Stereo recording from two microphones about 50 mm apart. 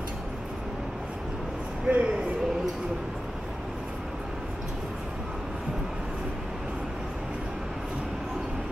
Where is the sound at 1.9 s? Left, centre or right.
Right.